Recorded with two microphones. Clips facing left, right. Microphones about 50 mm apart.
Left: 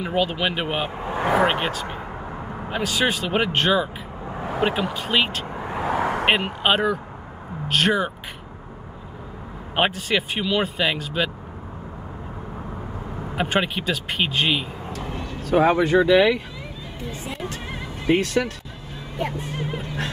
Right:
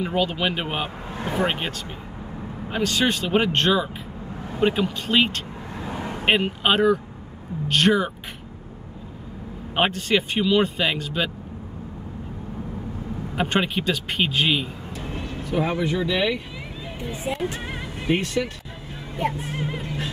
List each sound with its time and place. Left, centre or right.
0.0 s speech: centre
1.2 s speech: left
1.5 s speech: centre
5.8 s vehicle: left
6.2 s speech: centre
9.8 s speech: centre
13.4 s speech: centre
14.9 s speech: left
17.2 s speech: centre
18.0 s speech: left